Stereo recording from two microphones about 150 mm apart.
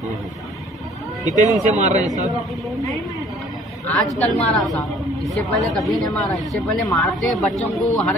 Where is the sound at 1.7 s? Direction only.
50° right (ahead or behind).